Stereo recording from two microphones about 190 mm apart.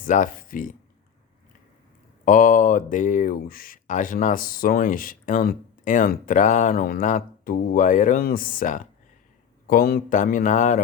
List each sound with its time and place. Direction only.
0.0 s speech: 45° left (ahead or behind)
2.2 s speech: 45° left (ahead or behind)